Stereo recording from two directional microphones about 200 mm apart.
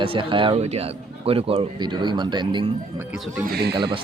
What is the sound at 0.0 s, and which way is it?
Speech, 25° right (ahead or behind).